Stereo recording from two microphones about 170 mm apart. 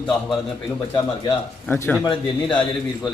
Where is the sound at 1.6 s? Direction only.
10° left (ahead or behind).